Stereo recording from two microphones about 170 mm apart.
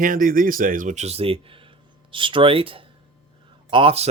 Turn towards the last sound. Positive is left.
turn(degrees=-35)  # may be behind; listen again after turning